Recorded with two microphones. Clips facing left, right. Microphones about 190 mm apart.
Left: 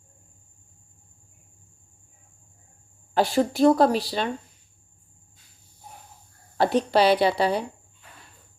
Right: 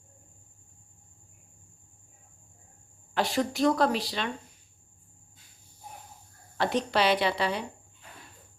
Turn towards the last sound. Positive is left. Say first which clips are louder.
# left 6 dB
turn(degrees=35)  # may be behind; listen again after turning